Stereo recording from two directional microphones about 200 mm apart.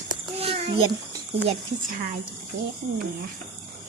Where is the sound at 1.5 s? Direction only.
40° right (ahead or behind).